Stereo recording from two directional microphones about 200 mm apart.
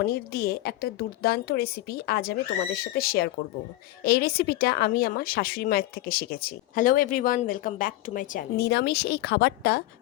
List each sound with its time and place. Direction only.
0.0 s a woman's voice: 50° left (ahead or behind)